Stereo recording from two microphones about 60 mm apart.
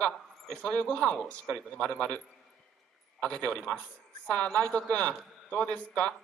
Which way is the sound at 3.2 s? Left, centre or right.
Left.